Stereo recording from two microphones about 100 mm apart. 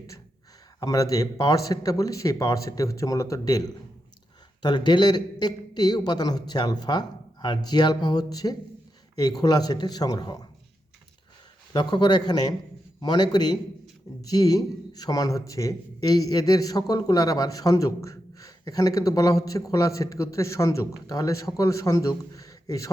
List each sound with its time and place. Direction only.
0.8 s a man's voice: 35° left (ahead or behind)
4.6 s a man's voice: 45° left (ahead or behind)
11.7 s a man's voice: 50° left (ahead or behind)